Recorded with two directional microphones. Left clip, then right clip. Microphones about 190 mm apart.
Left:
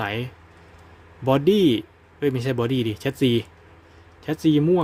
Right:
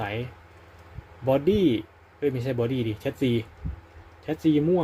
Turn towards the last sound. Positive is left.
turn(degrees=30)  # may be behind; listen again after turning